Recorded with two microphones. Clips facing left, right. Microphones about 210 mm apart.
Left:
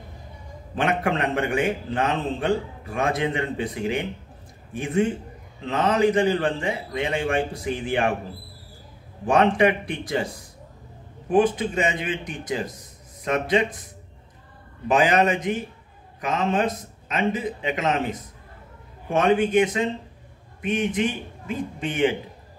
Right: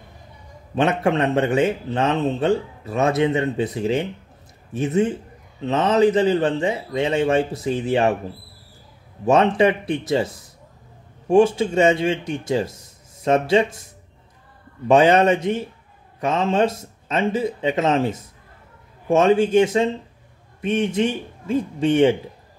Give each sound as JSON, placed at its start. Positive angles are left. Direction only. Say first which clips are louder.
{"t": 0.7, "sound": "a man's voice", "louder": "right 4 dB", "side_deg": -25}
{"t": 9.3, "sound": "a man's voice", "louder": "right 3 dB", "side_deg": -25}
{"t": 14.9, "sound": "a man's voice", "louder": "right 5 dB", "side_deg": -30}
{"t": 19.1, "sound": "a man's voice", "louder": "right 4 dB", "side_deg": -25}